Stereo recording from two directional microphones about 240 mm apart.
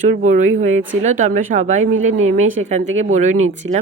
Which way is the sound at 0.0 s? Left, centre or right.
Right.